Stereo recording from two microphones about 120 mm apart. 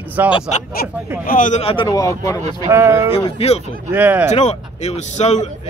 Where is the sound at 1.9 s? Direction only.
30° left (ahead or behind).